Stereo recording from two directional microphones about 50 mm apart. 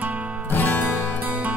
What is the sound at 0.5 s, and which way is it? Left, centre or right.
Music, left.